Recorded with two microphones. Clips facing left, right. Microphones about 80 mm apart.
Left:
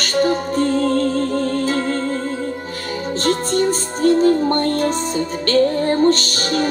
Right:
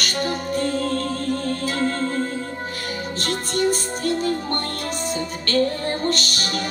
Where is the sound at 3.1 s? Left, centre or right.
Left.